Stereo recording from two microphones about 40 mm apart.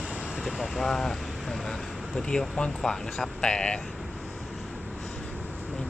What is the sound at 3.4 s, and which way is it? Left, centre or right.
Speech, left.